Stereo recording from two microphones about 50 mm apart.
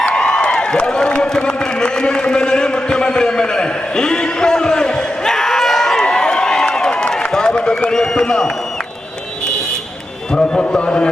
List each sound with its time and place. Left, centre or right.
0.0 s a sound: centre
7.9 s a man's voice: centre
10.3 s a man's voice: centre